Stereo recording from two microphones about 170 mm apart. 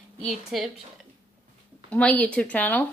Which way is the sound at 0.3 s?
Centre (ahead or behind).